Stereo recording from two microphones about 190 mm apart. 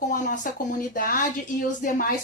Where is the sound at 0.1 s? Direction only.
45° left (ahead or behind).